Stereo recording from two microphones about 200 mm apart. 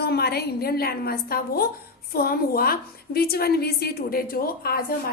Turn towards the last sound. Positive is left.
turn(degrees=45)  # may be behind; listen again after turning